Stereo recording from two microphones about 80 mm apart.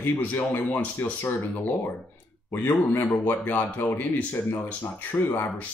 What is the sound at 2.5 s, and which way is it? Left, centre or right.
Speech, left.